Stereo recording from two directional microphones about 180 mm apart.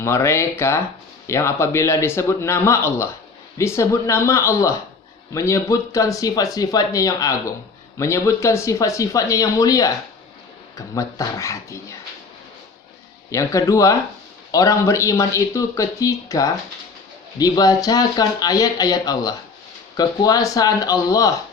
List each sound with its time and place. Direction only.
0.0 s speech: 15° left (ahead or behind)
13.3 s speech: 15° left (ahead or behind)